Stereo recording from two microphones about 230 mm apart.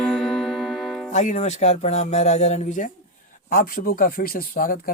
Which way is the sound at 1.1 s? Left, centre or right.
Left.